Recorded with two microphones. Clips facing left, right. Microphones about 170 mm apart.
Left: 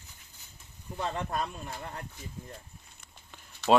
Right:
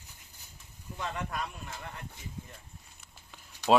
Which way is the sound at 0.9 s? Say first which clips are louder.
Left 4 dB; 30° left (ahead or behind).